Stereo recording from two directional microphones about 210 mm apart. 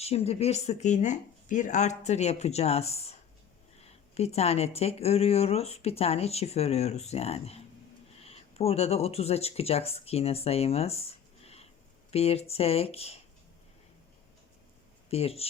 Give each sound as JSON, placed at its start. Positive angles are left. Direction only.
{"t": 0.0, "sound": "speech", "side_deg": 30}
{"t": 11.4, "sound": "a sound", "side_deg": 30}
{"t": 12.1, "sound": "speech", "side_deg": 30}
{"t": 15.1, "sound": "speech", "side_deg": 30}